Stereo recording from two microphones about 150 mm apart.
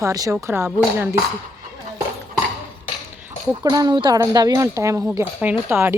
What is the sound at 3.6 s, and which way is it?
Speech, 25° right (ahead or behind).